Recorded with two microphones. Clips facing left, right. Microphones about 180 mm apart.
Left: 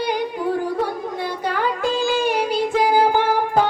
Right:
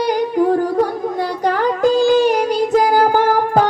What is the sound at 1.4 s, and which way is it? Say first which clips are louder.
Music: right 7 dB; 45° right (ahead or behind).